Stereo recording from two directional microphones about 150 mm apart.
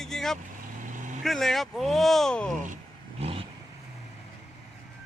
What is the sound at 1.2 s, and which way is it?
Speech, centre (ahead or behind).